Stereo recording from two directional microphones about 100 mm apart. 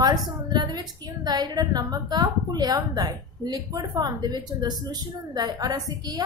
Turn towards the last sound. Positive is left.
turn(degrees=-45)  # may be behind; listen again after turning